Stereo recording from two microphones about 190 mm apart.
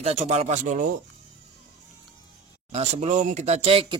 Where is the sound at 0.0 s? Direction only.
35° right (ahead or behind).